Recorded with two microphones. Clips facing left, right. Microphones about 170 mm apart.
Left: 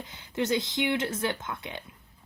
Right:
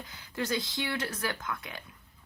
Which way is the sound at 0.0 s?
25° left (ahead or behind).